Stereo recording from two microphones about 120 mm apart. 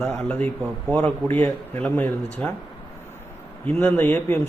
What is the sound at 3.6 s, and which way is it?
Speech, 15° left (ahead or behind).